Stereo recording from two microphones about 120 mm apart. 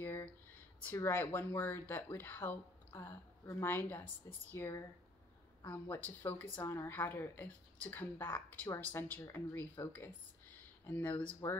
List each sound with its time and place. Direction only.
0.0 s a sound: 15° left (ahead or behind)
0.9 s speech: 20° left (ahead or behind)
6.0 s speech: 15° left (ahead or behind)